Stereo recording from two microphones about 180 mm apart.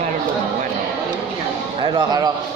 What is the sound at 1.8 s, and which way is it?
Speech, 25° right (ahead or behind).